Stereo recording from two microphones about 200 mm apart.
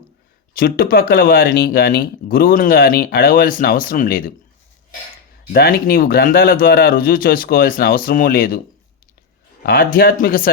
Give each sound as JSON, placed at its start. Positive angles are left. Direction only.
{"t": 0.5, "sound": "speech", "side_deg": 45}
{"t": 5.5, "sound": "speech", "side_deg": 50}
{"t": 9.6, "sound": "speech", "side_deg": 45}